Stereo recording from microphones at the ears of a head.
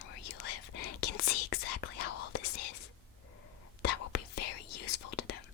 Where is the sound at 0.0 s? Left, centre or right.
Left.